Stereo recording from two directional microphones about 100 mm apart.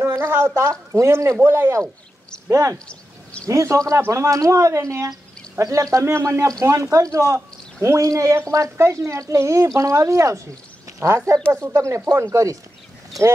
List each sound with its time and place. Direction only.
0.0 s gargling: 25° right (ahead or behind)
0.6 s speech: 30° right (ahead or behind)